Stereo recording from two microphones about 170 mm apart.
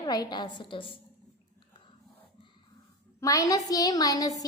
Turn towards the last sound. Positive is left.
turn(degrees=20)  # may be behind; listen again after turning